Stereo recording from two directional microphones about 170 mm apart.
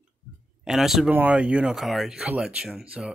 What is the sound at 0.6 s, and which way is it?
Speech, centre (ahead or behind).